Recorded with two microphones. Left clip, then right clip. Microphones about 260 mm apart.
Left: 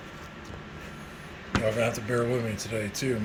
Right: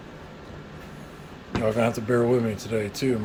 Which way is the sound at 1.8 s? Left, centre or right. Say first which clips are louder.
Right 4 dB; centre.